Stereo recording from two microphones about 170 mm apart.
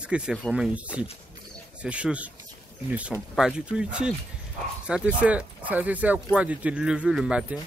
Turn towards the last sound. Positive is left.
turn(degrees=-5)  # may be behind; listen again after turning